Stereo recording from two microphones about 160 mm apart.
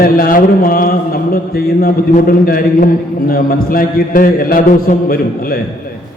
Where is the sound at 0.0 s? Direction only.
65° left (ahead or behind).